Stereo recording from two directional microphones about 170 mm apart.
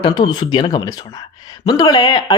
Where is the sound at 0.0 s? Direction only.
25° left (ahead or behind).